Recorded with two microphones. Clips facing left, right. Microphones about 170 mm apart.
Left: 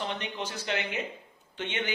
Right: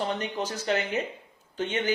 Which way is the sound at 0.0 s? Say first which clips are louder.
Right 5 dB; 40° right (ahead or behind).